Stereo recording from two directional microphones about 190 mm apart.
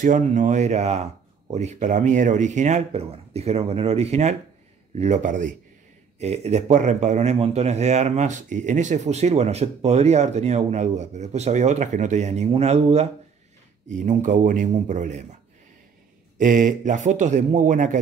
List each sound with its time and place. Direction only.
0.0 s speech: 40° right (ahead or behind)
16.3 s speech: 45° right (ahead or behind)